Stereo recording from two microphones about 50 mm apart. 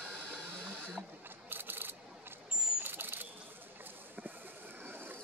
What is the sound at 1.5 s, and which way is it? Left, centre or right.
Camera, right.